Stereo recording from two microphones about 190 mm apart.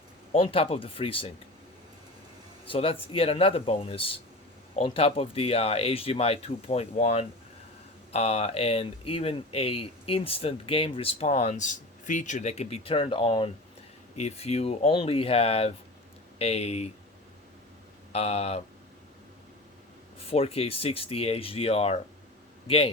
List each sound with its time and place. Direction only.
0.3 s speech: 30° left (ahead or behind)
2.6 s speech: 30° left (ahead or behind)
18.1 s speech: 35° left (ahead or behind)
20.1 s speech: 30° left (ahead or behind)